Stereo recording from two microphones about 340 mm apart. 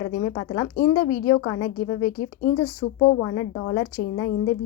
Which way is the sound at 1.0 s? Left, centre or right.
Left.